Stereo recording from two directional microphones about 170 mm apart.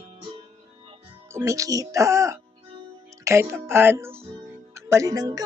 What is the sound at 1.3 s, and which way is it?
Speech, 20° right (ahead or behind).